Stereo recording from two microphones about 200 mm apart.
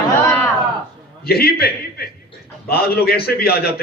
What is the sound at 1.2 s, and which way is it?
A man's voice, 50° left (ahead or behind).